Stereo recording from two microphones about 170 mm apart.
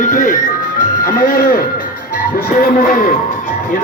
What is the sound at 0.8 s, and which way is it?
Music, 55° left (ahead or behind).